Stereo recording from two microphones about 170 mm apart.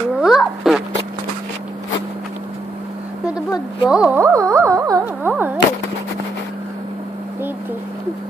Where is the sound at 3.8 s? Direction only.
5° right (ahead or behind).